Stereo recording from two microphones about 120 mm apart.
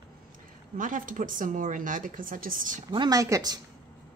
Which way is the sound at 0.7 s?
90° right.